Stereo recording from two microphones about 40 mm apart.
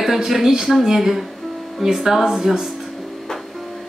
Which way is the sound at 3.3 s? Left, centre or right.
Centre.